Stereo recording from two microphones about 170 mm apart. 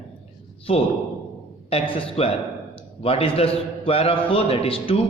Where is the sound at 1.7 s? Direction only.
30° left (ahead or behind).